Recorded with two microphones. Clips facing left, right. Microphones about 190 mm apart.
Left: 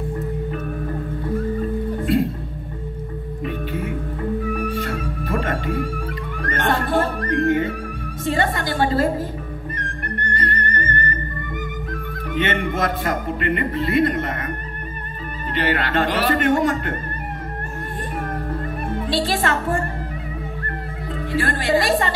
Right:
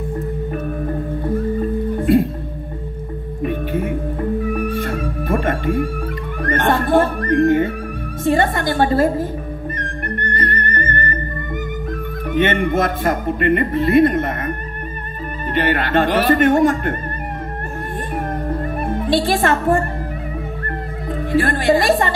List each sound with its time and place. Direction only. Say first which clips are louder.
3.4 s music: right 6 dB; 50° right (ahead or behind)
8.2 s a man's voice: right 5 dB; 50° right (ahead or behind)
10.3 s music: right 1 dB; 55° right (ahead or behind)
12.4 s a man's voice: right 5 dB; 50° right (ahead or behind)
15.5 s a man's voice: right 4 dB; 50° right (ahead or behind)
18.6 s music: right 4 dB; 50° right (ahead or behind)
21.1 s a woman's voice: right 5 dB; 50° right (ahead or behind)